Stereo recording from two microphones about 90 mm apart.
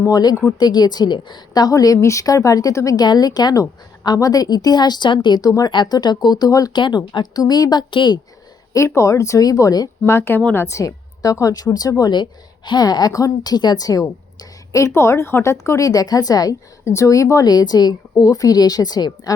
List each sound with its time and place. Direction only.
0.0 s a woman's voice: 45° left (ahead or behind)
5.7 s a woman's voice: 55° left (ahead or behind)
6.7 s speech: 60° left (ahead or behind)
7.3 s a woman's voice: 45° left (ahead or behind); by 8.2 s 60° left (ahead or behind)
9.0 s speech: 35° left (ahead or behind)
10.1 s a woman's voice: 25° left (ahead or behind); by 19.3 s 50° left (ahead or behind)